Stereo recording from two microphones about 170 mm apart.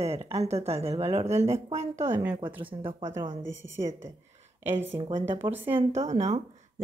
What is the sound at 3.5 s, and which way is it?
Speech, 90° right.